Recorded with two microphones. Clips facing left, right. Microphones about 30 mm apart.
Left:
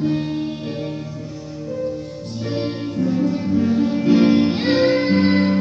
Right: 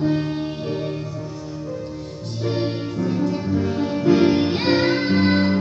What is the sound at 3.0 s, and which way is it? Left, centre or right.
Music, right.